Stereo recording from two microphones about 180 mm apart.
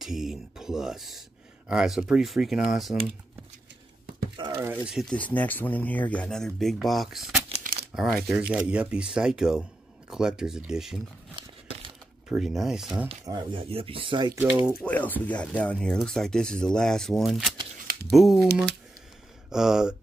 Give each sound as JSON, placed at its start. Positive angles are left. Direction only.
{"t": 0.0, "sound": "a sound", "side_deg": 0}
{"t": 1.7, "sound": "speech", "side_deg": -5}
{"t": 4.4, "sound": "a sound", "side_deg": -30}
{"t": 4.8, "sound": "speech", "side_deg": 0}
{"t": 12.3, "sound": "speech", "side_deg": 0}
{"t": 13.2, "sound": "speech", "side_deg": -25}
{"t": 14.8, "sound": "speech", "side_deg": 10}
{"t": 19.5, "sound": "speech", "side_deg": -5}